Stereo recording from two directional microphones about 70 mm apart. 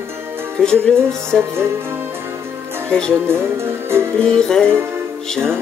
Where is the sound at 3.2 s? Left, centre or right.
Right.